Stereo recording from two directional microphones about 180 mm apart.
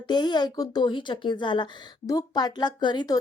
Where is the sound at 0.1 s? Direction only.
25° left (ahead or behind).